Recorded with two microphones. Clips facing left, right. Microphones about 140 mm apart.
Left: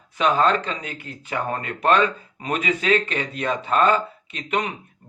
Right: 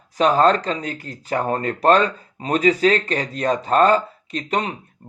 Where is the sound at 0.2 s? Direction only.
40° right (ahead or behind).